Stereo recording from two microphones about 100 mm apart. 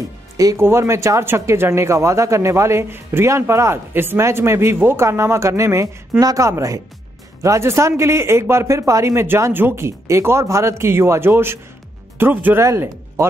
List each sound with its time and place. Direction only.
0.6 s speech: 25° right (ahead or behind)